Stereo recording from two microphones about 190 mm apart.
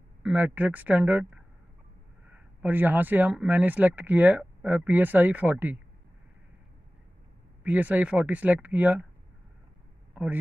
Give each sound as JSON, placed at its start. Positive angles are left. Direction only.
{"t": 0.2, "sound": "speech", "side_deg": -10}
{"t": 7.6, "sound": "speech", "side_deg": -10}